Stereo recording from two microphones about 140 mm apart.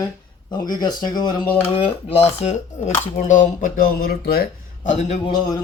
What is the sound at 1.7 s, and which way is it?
Speech, 45° left (ahead or behind).